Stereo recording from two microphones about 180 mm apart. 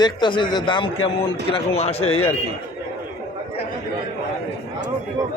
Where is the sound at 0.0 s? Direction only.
25° left (ahead or behind).